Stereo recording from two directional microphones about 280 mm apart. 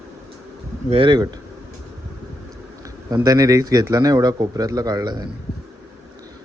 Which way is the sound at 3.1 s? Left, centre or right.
Centre.